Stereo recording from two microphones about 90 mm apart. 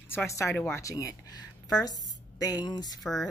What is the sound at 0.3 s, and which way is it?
Speech, 35° left (ahead or behind).